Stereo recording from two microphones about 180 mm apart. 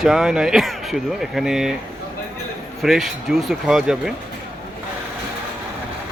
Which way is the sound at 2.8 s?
Centre (ahead or behind).